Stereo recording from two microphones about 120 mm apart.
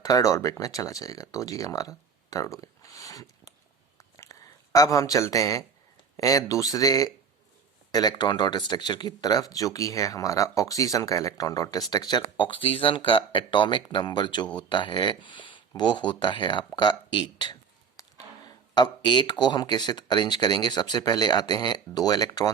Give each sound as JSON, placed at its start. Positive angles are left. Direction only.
{"t": 0.0, "sound": "speech", "side_deg": 30}
{"t": 3.9, "sound": "a sound", "side_deg": 25}
{"t": 6.1, "sound": "speech", "side_deg": 30}